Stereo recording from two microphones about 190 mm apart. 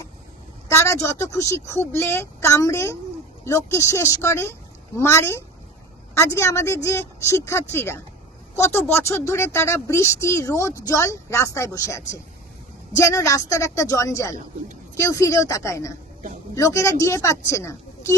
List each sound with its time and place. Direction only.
0.7 s speech: 15° left (ahead or behind)